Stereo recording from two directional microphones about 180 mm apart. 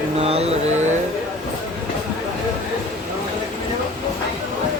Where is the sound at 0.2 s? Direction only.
35° right (ahead or behind).